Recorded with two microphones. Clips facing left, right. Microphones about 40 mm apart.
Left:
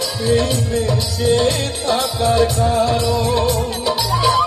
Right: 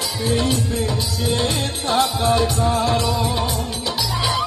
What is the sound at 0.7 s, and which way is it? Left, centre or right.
Music, left.